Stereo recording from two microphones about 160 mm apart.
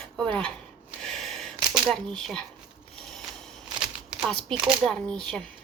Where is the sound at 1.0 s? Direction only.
Centre (ahead or behind).